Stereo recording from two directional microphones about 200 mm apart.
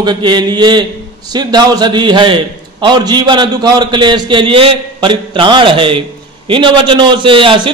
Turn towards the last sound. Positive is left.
turn(degrees=-25)  # may be behind; listen again after turning